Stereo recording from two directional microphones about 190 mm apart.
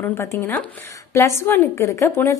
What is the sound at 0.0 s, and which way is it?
A woman's voice, 15° left (ahead or behind).